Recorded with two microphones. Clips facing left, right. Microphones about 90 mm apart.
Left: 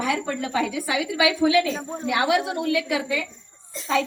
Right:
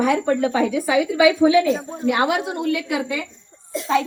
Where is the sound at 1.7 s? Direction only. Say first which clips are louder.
Right 6 dB; 15° right (ahead or behind).